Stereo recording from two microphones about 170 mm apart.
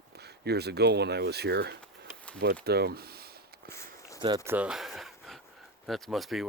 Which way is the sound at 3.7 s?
15° left (ahead or behind).